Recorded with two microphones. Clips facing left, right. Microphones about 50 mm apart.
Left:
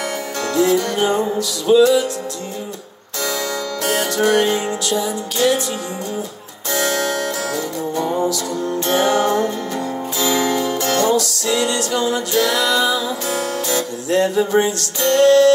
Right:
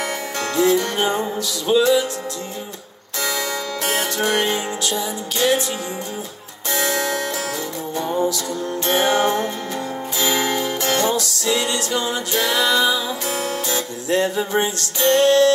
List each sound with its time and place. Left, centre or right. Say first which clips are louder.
0.4 s music: left 1 dB; right
3.2 s music: left 1 dB; right
6.8 s music: left 2 dB; right
7.9 s music: left 1 dB; left
8.7 s music: left 1 dB; right